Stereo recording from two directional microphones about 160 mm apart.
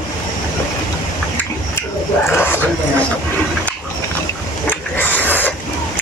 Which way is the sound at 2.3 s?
15° left (ahead or behind).